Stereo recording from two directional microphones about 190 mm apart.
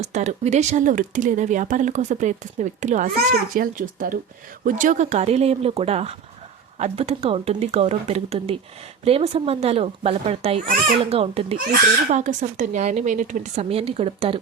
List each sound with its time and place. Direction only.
0.1 s speech: 40° right (ahead or behind)
3.2 s a child's voice: 50° right (ahead or behind); by 11.5 s 30° right (ahead or behind)
11.5 s speech: 45° right (ahead or behind)